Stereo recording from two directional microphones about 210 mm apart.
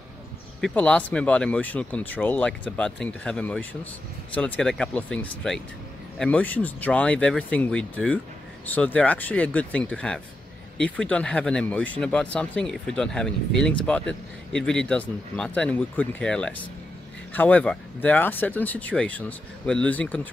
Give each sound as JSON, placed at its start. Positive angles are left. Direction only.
{"t": 0.6, "sound": "speech", "side_deg": 5}